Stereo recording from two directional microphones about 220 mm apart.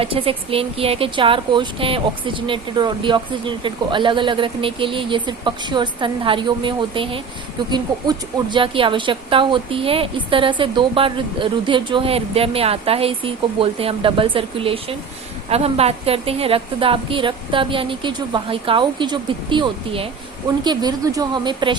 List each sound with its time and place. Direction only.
0.0 s a woman's voice: 25° right (ahead or behind)